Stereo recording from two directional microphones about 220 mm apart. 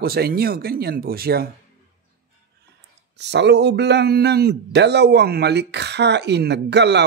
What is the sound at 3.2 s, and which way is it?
A man's voice, 50° right (ahead or behind).